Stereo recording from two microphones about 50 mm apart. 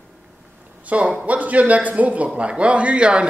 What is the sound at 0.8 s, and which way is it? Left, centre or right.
Speech, right.